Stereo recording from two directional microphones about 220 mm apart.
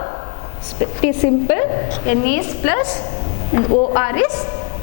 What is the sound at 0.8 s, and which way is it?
A woman's voice, 15° left (ahead or behind).